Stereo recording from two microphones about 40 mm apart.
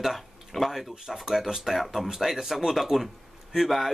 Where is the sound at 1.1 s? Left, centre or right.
Centre.